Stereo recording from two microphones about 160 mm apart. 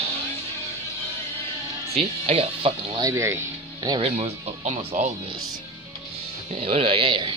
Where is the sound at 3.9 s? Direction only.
40° right (ahead or behind).